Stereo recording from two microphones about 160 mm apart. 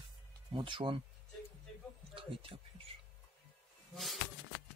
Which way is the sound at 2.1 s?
35° right (ahead or behind).